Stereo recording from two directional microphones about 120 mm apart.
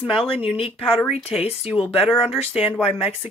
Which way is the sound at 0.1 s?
50° left (ahead or behind).